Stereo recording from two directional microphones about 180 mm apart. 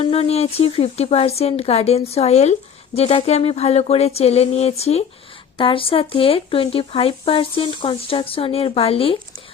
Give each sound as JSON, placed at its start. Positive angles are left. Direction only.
{"t": 0.0, "sound": "speech", "side_deg": 30}